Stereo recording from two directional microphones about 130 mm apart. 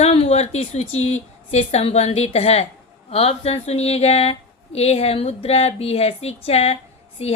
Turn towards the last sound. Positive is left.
turn(degrees=50)  # may be behind; listen again after turning